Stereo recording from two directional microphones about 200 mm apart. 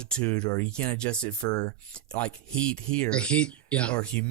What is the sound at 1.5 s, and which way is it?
Speech, 20° left (ahead or behind).